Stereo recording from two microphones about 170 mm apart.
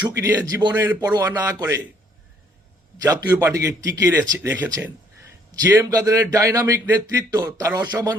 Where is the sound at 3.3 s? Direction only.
15° right (ahead or behind).